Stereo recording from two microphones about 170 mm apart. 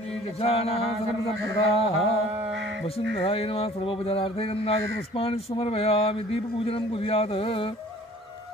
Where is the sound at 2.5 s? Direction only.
90° right.